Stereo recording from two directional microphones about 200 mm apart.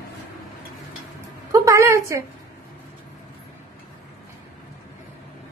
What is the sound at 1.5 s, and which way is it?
Speech, 15° right (ahead or behind).